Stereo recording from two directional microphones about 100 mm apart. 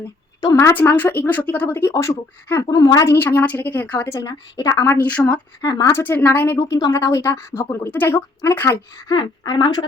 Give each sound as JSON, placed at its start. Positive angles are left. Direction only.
{"t": 0.5, "sound": "speech", "side_deg": 25}
{"t": 3.2, "sound": "speech", "side_deg": 20}
{"t": 4.1, "sound": "speech", "side_deg": 40}
{"t": 4.9, "sound": "speech", "side_deg": 15}
{"t": 6.6, "sound": "speech", "side_deg": 40}
{"t": 9.0, "sound": "speech", "side_deg": 45}